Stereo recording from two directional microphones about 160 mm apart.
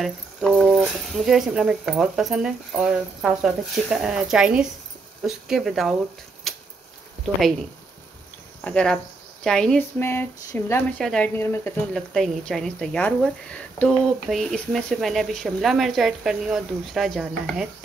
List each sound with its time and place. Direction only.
0.0 s a woman's voice: centre (ahead or behind)
6.5 s a sound: centre (ahead or behind)
8.5 s speech: 5° left (ahead or behind)
11.0 s speech: 5° left (ahead or behind)
12.1 s a woman's voice: centre (ahead or behind)